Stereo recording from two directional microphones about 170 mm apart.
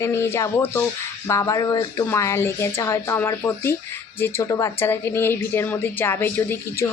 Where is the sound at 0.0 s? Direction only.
15° left (ahead or behind).